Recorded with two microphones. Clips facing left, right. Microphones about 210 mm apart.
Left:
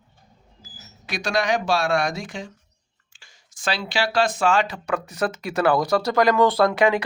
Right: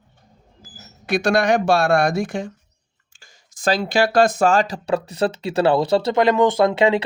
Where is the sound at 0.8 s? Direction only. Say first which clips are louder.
Right 10 dB; 55° right (ahead or behind).